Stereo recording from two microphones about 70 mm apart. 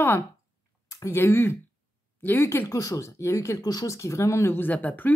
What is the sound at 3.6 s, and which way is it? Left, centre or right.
Speech, left.